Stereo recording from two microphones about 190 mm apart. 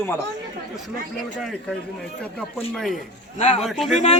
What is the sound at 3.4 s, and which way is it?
Speech, 35° left (ahead or behind).